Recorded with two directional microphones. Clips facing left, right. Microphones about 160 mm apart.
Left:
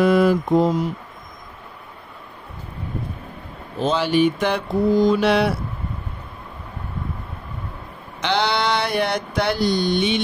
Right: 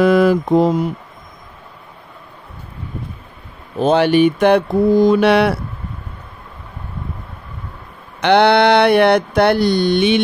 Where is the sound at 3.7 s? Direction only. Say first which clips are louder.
Right 6 dB; 60° right (ahead or behind).